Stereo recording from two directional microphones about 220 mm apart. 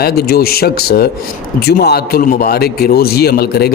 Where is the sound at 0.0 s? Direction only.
45° left (ahead or behind).